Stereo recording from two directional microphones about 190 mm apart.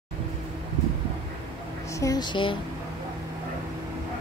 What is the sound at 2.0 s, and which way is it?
Speech, 20° left (ahead or behind).